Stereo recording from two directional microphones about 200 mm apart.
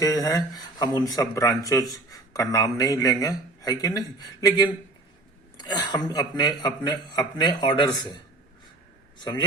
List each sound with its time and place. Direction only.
0.0 s a man's voice: 15° left (ahead or behind)